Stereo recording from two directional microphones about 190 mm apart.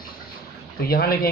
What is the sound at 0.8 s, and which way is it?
Speech, 55° left (ahead or behind).